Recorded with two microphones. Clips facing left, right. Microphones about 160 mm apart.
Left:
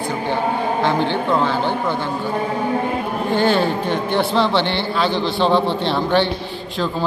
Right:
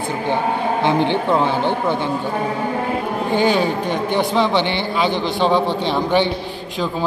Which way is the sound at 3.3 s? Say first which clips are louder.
Even; 15° right (ahead or behind).